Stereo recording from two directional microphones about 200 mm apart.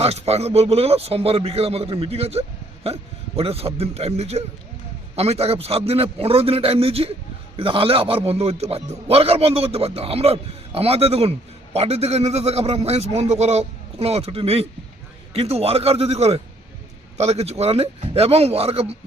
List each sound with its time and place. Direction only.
0.0 s a man's voice: 30° right (ahead or behind)